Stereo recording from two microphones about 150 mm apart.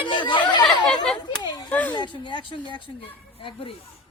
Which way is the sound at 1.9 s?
30° left (ahead or behind).